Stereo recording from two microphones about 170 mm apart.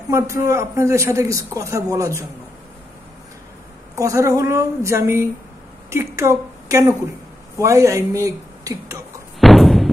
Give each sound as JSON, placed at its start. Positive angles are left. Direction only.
{"t": 0.1, "sound": "a man's voice", "side_deg": -15}
{"t": 3.9, "sound": "a man's voice", "side_deg": -20}
{"t": 9.4, "sound": "a sound", "side_deg": 0}